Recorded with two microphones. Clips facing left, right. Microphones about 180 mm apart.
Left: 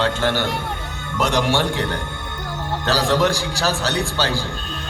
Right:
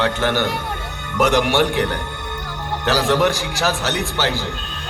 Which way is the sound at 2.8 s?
15° right (ahead or behind).